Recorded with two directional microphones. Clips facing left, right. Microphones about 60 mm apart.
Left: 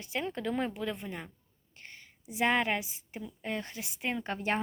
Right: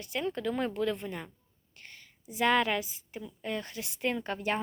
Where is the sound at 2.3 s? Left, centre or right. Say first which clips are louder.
Right 2 dB; left.